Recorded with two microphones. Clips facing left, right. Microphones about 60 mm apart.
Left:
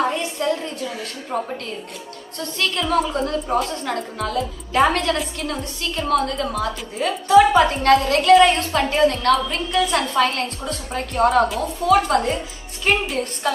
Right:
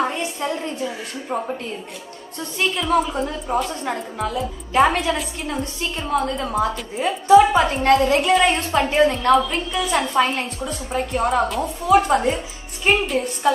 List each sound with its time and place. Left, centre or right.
0.0 s a woman's voice: right
1.3 s a woman's voice: centre
2.3 s a woman's voice: right
2.8 s a woman's voice: centre
3.4 s a woman's voice: centre
3.8 s a woman's voice: centre
5.4 s a woman's voice: centre
9.7 s a woman's voice: centre
10.1 s a woman's voice: centre
10.7 s a woman's voice: centre
11.8 s a woman's voice: right
13.0 s a woman's voice: centre